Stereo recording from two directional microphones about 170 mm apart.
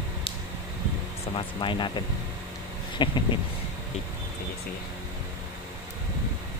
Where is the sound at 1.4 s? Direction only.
30° left (ahead or behind).